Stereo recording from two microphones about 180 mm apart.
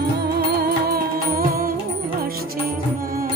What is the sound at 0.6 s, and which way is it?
Music, 55° right (ahead or behind).